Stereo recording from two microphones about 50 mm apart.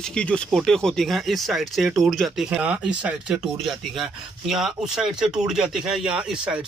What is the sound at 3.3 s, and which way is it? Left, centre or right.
Speech, centre.